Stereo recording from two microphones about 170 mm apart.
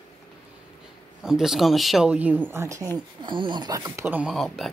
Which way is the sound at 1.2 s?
5° right (ahead or behind).